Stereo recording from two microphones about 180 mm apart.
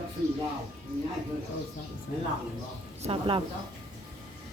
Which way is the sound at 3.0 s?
30° right (ahead or behind).